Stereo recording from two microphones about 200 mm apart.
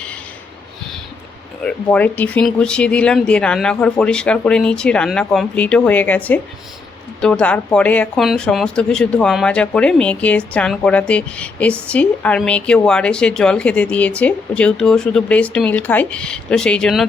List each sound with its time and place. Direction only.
1.6 s speech: 5° left (ahead or behind)